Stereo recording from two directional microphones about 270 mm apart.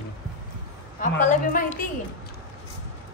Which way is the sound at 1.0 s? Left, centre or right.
Left.